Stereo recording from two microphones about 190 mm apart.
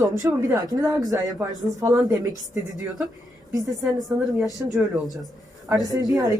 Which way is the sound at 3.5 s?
20° right (ahead or behind).